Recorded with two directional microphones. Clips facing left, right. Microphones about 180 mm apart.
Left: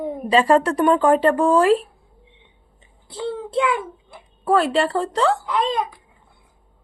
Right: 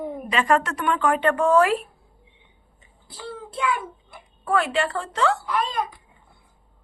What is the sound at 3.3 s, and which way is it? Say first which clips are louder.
A child's voice: left 5 dB; 25° left (ahead or behind).